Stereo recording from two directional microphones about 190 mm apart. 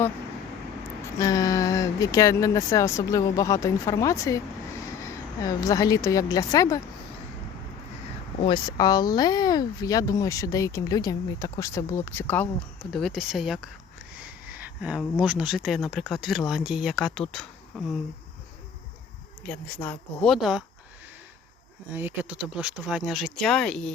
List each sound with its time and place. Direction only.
1.2 s speech: 20° left (ahead or behind)
8.4 s speech: 25° left (ahead or behind); by 17.8 s centre (ahead or behind)
19.4 s speech: 5° left (ahead or behind)
21.9 s speech: 10° right (ahead or behind)